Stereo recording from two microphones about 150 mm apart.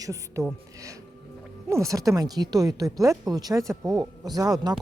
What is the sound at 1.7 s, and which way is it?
Speech, 20° right (ahead or behind).